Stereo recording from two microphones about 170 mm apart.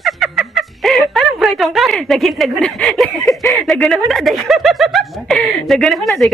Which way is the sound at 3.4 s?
20° left (ahead or behind).